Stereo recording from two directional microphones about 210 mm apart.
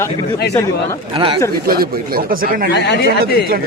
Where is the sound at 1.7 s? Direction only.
45° right (ahead or behind).